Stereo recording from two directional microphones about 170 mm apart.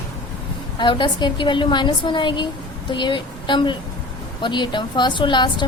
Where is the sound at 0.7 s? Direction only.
25° left (ahead or behind).